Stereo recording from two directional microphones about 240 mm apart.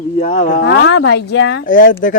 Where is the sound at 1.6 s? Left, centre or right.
Left.